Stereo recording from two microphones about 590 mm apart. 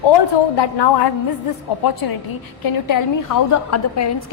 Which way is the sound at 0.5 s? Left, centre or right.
Left.